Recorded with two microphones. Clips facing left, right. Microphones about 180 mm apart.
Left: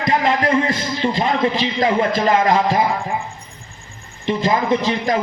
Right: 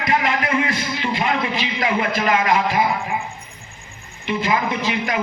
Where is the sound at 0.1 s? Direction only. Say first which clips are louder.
Left 4 dB; 25° left (ahead or behind).